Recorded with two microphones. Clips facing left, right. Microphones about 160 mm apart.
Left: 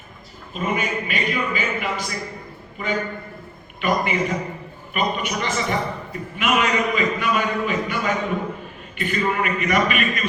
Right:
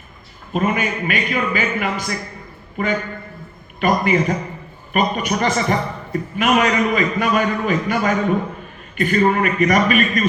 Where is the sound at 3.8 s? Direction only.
45° right (ahead or behind).